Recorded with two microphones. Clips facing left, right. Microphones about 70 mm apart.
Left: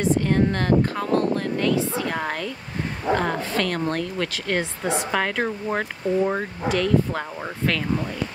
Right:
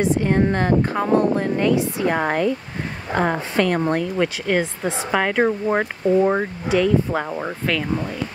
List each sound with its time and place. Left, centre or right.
0.0 s speech: right